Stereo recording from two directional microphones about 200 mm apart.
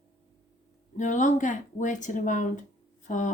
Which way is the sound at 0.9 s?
40° left (ahead or behind).